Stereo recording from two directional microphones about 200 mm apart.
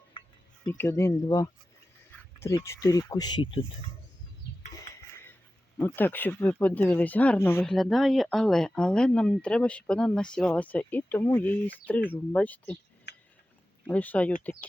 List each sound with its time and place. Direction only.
0.6 s speech: 10° left (ahead or behind)
5.8 s speech: 10° left (ahead or behind)
13.1 s a sound: 55° left (ahead or behind)
13.8 s speech: 10° left (ahead or behind)